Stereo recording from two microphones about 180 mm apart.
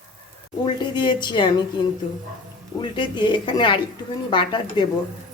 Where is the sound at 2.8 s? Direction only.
25° left (ahead or behind).